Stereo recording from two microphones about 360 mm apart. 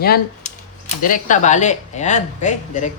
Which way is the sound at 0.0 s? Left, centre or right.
Left.